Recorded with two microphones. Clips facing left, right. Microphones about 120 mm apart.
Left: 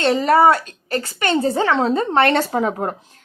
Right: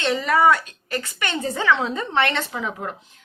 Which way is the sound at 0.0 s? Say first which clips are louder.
Left 5 dB; 40° left (ahead or behind).